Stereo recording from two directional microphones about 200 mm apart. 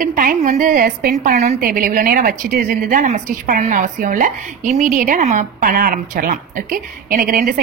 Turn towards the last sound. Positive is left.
turn(degrees=-45)  # may be behind; listen again after turning